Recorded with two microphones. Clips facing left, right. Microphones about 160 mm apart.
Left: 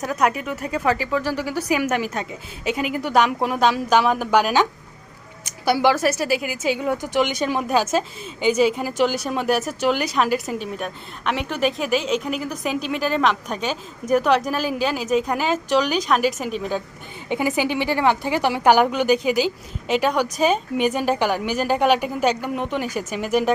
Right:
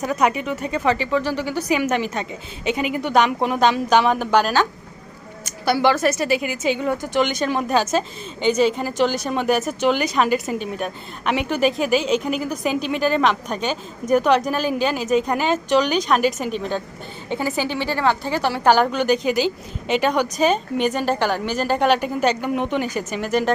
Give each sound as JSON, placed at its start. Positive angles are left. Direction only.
{"t": 0.0, "sound": "a woman's voice", "side_deg": 0}
{"t": 17.2, "sound": "a woman's voice", "side_deg": 15}